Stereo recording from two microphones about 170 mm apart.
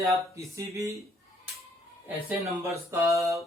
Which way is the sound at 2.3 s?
20° right (ahead or behind).